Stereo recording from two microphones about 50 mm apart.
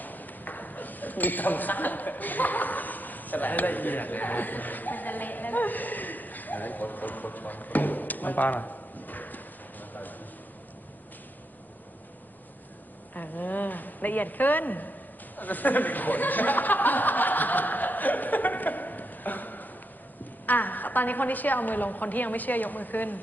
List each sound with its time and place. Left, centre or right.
0.0 s speech: left
9.9 s a sound: left
13.1 s a woman's voice: left
15.4 s chuckle: left
20.5 s a woman's voice: left